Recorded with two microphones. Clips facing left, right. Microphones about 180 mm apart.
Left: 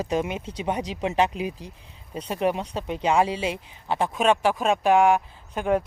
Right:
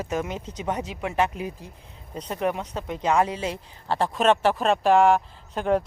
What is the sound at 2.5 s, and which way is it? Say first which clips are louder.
Speech: left 2 dB; 25° left (ahead or behind).